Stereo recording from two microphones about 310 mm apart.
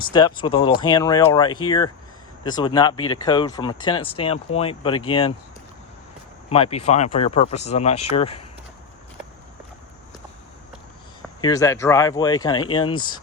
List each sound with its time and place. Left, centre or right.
0.1 s speech: centre
6.5 s speech: centre
11.3 s speech: centre